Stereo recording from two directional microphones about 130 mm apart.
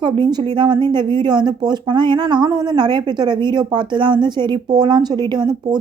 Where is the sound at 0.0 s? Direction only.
35° right (ahead or behind).